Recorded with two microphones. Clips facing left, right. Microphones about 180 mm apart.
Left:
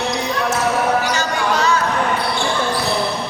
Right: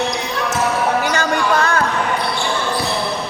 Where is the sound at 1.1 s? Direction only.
55° right (ahead or behind).